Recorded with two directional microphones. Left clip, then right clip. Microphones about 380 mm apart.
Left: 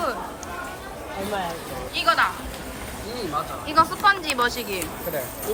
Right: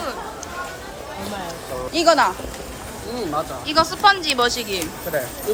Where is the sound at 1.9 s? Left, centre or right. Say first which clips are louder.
Right 5 dB; centre.